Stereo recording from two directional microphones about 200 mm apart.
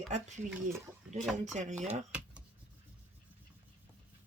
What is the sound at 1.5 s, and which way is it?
Speech, 35° right (ahead or behind).